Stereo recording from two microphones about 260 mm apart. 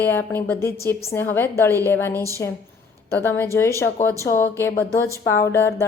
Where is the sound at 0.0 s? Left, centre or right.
Centre.